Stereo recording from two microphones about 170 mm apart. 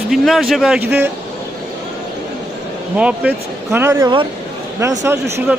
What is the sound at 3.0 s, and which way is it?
Speech, 10° right (ahead or behind).